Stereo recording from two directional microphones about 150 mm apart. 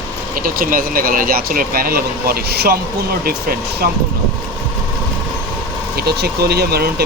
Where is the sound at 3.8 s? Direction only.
90° right.